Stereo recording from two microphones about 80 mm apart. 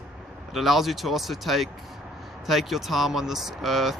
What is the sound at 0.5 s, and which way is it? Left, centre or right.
Speech, centre.